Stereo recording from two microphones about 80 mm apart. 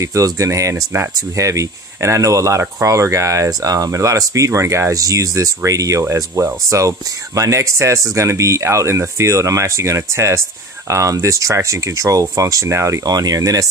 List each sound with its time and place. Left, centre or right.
0.0 s speech: right